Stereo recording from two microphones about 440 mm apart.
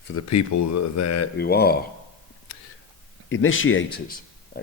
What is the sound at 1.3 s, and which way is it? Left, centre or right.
Speech, left.